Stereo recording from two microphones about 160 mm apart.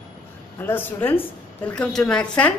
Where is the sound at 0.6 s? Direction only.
10° left (ahead or behind).